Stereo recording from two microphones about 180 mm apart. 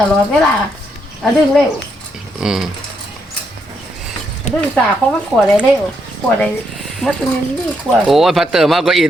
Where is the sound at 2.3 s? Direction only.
5° right (ahead or behind).